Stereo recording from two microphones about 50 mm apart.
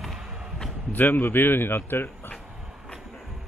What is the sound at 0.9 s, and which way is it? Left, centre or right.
Speech, left.